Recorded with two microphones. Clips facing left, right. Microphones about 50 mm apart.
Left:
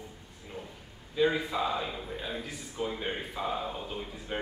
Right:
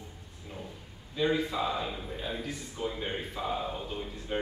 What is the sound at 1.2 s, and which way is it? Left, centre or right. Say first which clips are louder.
A man's voice: left 1 dB; centre.